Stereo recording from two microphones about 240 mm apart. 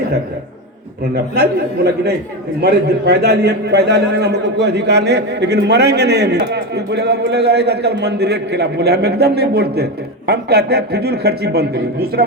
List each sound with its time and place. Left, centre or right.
1.1 s a man's voice: right